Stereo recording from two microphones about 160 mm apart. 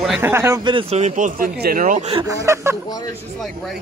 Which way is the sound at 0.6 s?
30° right (ahead or behind).